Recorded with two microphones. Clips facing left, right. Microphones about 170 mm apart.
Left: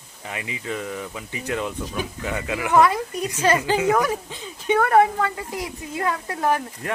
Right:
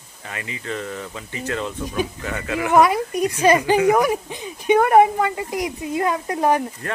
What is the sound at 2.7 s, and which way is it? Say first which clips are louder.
A woman's voice: right 2 dB; 15° right (ahead or behind).